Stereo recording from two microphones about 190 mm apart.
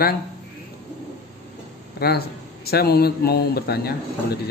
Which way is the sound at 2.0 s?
55° left (ahead or behind).